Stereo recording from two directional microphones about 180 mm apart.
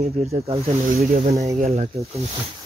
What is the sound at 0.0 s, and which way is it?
Speech, 35° right (ahead or behind).